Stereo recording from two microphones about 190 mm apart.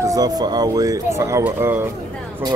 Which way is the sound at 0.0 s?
20° right (ahead or behind).